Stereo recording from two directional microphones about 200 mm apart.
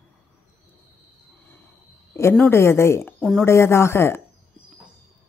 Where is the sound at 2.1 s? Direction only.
10° left (ahead or behind).